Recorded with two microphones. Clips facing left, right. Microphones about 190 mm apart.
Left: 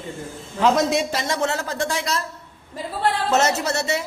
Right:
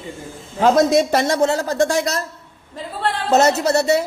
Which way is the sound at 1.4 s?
35° right (ahead or behind).